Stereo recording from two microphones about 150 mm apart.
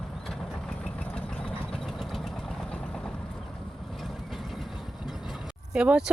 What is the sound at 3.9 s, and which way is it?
Speech, centre (ahead or behind).